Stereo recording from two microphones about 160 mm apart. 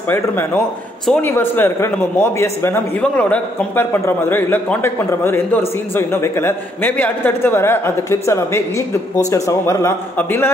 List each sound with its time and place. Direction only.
0.1 s a man's voice: 15° left (ahead or behind)